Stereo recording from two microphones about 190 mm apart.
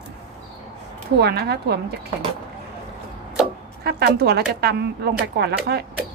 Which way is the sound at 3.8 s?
55° right (ahead or behind).